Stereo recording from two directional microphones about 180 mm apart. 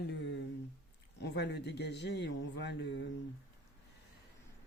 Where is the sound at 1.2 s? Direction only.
70° left (ahead or behind).